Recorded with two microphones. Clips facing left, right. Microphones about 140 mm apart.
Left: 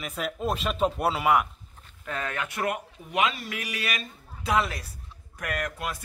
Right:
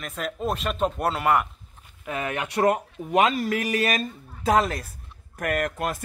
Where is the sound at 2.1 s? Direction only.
15° right (ahead or behind).